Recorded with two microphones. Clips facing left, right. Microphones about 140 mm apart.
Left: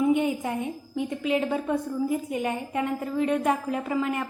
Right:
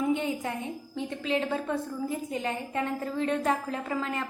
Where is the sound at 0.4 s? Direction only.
15° left (ahead or behind).